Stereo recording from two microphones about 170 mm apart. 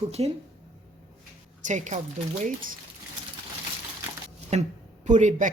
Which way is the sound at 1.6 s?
45° right (ahead or behind).